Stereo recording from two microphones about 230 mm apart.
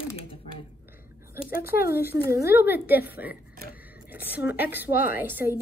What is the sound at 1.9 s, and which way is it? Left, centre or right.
A woman's voice, centre.